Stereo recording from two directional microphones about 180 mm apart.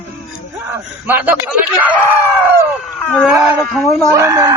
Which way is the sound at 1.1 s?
10° right (ahead or behind).